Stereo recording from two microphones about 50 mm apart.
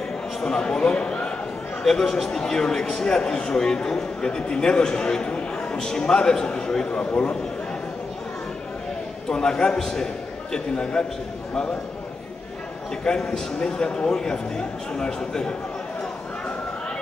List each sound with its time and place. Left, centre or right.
0.4 s speech: centre
1.8 s a man's voice: centre
9.3 s a man's voice: centre
13.1 s a man's voice: centre